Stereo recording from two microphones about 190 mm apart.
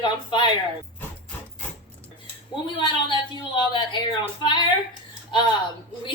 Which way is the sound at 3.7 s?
25° left (ahead or behind).